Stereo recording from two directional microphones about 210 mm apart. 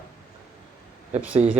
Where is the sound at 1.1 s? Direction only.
5° right (ahead or behind).